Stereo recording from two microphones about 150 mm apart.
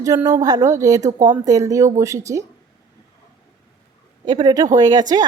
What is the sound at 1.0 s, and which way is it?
Speech, 55° right (ahead or behind).